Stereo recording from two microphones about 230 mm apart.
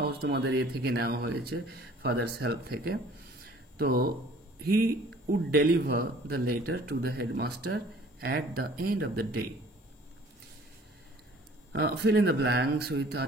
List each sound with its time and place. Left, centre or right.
0.0 s speech: right
11.7 s speech: right